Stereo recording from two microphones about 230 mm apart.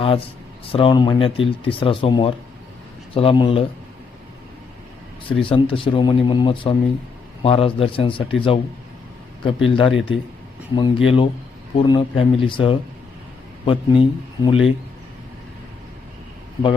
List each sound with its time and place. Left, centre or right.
0.0 s speech: left
5.4 s speech: left
9.6 s speech: left